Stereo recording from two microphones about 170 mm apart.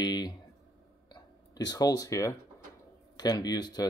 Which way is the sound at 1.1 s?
25° left (ahead or behind).